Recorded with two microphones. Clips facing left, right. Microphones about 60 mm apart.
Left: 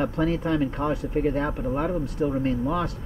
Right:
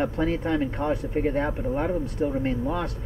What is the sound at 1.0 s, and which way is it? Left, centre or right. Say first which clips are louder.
Speech: left 1 dB; right.